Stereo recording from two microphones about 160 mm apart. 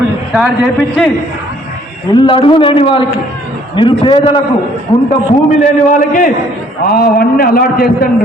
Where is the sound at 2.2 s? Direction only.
30° left (ahead or behind).